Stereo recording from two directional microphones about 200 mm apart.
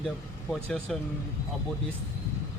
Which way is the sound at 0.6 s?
5° left (ahead or behind).